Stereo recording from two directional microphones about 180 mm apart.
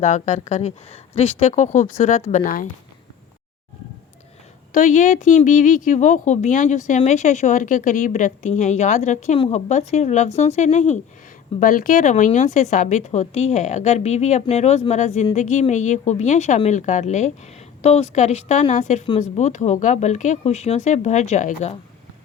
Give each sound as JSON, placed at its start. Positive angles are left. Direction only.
{"t": 0.0, "sound": "speech", "side_deg": 40}
{"t": 4.7, "sound": "speech", "side_deg": 45}